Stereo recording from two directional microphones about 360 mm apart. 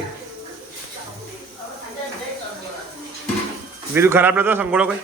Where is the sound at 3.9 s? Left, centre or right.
Centre.